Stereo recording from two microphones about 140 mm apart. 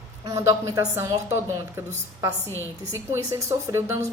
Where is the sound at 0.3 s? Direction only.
25° right (ahead or behind).